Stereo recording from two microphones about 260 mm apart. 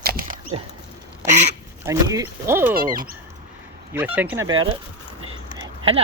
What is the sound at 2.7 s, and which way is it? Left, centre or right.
Speech, right.